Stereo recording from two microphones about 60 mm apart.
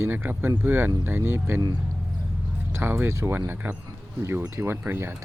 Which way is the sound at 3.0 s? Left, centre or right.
Right.